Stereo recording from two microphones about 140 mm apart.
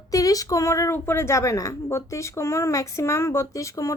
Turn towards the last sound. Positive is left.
turn(degrees=25)  # may be behind; listen again after turning